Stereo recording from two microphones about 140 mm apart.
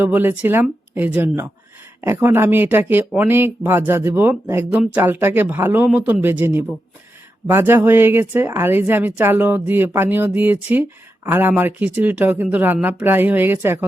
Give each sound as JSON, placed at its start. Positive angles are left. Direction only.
{"t": 0.0, "sound": "speech", "side_deg": -15}